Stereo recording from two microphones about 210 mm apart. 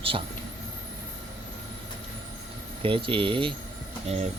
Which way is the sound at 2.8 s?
25° right (ahead or behind).